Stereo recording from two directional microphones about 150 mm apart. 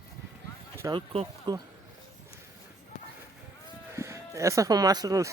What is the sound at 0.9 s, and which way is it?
Speech, 35° right (ahead or behind).